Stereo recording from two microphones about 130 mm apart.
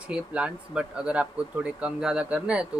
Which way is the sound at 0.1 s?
10° right (ahead or behind).